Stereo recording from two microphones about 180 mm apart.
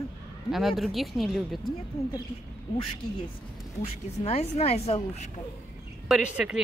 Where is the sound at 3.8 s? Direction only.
35° left (ahead or behind).